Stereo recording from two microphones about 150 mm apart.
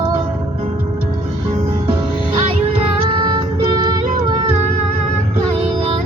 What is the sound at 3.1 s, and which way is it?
Music, 30° right (ahead or behind).